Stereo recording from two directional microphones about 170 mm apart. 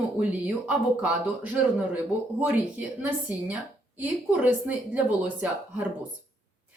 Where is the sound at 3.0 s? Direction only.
10° right (ahead or behind).